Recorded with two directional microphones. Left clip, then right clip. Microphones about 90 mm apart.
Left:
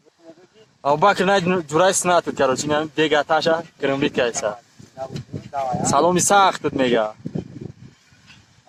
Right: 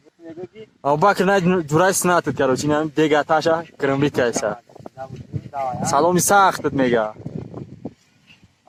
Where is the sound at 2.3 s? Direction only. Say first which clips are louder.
Even; centre (ahead or behind).